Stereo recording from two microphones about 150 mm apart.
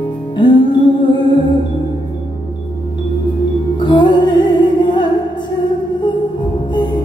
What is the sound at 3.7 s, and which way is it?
Music, 30° left (ahead or behind).